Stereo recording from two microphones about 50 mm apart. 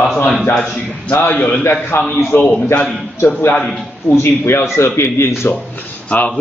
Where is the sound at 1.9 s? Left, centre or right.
Left.